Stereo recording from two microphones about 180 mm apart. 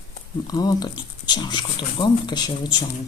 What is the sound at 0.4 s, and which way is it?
Speech, 20° left (ahead or behind).